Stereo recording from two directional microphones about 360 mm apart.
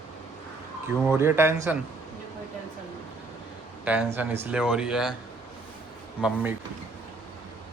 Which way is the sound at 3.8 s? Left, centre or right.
Centre.